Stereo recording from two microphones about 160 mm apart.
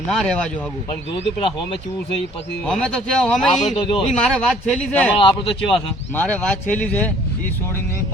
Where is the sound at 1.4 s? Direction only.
35° left (ahead or behind).